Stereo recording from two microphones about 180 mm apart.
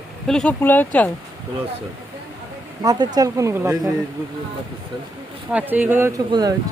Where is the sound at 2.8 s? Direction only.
20° right (ahead or behind).